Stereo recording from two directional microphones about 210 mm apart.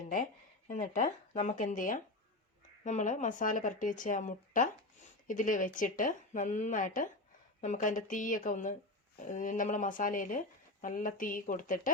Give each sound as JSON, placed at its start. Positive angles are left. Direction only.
{"t": 0.7, "sound": "speech", "side_deg": 35}